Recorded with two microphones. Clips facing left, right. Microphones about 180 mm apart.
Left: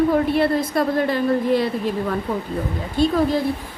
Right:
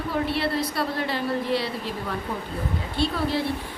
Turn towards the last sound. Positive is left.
turn(degrees=45)  # may be behind; listen again after turning